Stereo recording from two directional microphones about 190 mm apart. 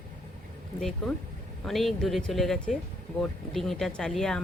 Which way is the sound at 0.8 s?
Centre (ahead or behind).